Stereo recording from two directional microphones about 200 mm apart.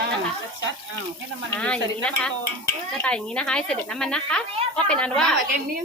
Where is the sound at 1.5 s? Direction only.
5° left (ahead or behind).